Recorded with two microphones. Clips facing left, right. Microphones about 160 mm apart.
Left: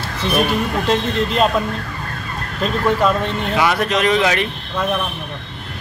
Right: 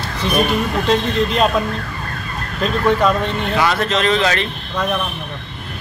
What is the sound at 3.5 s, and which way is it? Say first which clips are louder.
A man's voice: left 1 dB; 15° left (ahead or behind).